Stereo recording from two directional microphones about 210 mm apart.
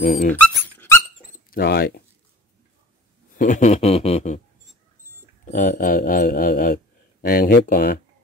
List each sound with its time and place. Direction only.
0.0 s speech: 45° left (ahead or behind)
0.3 s dog: 10° left (ahead or behind)
1.5 s speech: 50° left (ahead or behind)
3.3 s a sound: 35° left (ahead or behind)
5.5 s speech: 40° left (ahead or behind)